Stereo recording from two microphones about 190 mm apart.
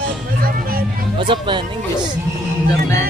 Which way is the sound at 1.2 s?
25° right (ahead or behind).